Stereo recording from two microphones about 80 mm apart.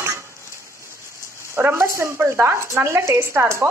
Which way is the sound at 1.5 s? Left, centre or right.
Right.